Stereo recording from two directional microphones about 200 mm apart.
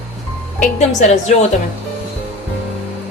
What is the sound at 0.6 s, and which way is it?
Speech, 35° left (ahead or behind).